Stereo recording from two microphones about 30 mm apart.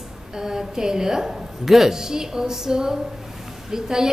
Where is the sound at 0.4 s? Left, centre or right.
Centre.